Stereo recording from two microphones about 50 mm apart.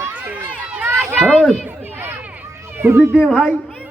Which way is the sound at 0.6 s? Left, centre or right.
Right.